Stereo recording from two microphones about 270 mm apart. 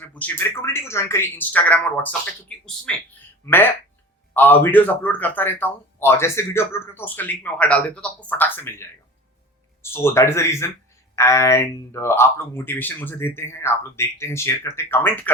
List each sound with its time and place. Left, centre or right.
0.0 s speech: centre